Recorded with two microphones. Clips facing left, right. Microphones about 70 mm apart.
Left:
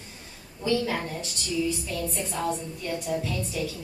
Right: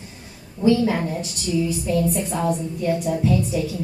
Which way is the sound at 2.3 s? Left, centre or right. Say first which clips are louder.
Right 6 dB; centre.